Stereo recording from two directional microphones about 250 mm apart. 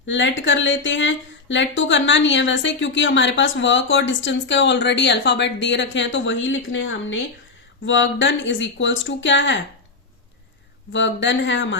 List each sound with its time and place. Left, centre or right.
0.1 s speech: left
10.9 s speech: left